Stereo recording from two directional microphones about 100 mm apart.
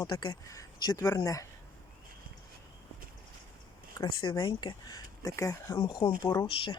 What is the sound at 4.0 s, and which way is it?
Speech, 50° left (ahead or behind).